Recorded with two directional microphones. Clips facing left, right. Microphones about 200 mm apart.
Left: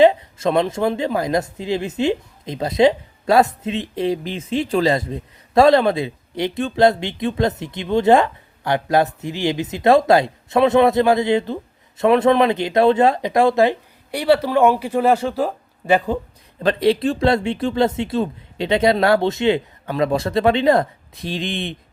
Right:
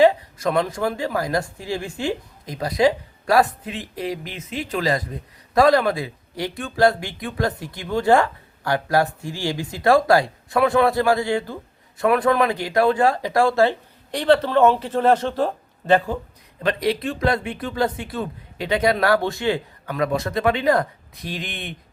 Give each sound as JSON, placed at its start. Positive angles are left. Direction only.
{"t": 0.0, "sound": "speech", "side_deg": 25}
{"t": 16.6, "sound": "speech", "side_deg": 30}